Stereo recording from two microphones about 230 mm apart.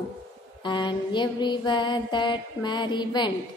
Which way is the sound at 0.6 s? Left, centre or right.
Centre.